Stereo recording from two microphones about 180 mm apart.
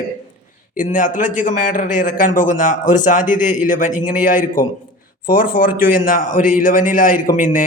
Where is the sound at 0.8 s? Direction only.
45° left (ahead or behind).